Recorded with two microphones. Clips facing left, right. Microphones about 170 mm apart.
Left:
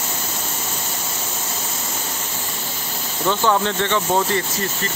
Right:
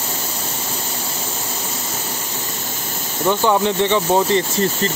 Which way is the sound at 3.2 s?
15° right (ahead or behind).